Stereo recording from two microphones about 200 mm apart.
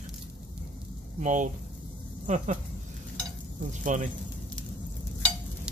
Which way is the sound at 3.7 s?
40° right (ahead or behind).